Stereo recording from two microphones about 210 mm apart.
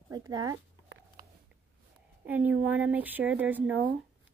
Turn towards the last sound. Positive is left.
turn(degrees=-10)  # may be behind; listen again after turning